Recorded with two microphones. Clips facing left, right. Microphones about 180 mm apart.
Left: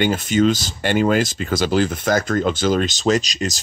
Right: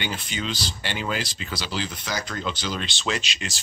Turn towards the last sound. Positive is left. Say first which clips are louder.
# left 10 dB
turn(degrees=40)  # may be behind; listen again after turning